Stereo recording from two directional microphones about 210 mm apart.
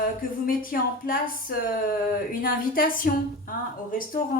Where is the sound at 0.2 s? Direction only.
45° left (ahead or behind).